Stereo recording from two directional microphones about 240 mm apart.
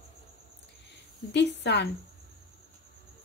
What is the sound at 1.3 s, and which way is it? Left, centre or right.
Cricket, left.